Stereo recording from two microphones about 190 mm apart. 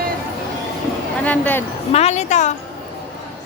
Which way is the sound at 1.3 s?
10° left (ahead or behind).